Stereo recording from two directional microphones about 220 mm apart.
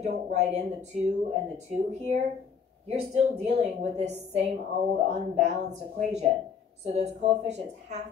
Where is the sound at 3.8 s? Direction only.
30° right (ahead or behind).